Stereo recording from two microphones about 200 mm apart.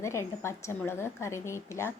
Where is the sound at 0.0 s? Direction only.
15° left (ahead or behind).